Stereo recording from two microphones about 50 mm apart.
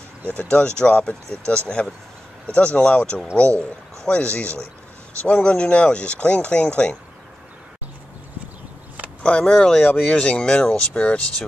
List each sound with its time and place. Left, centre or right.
0.3 s speech: left
9.4 s speech: centre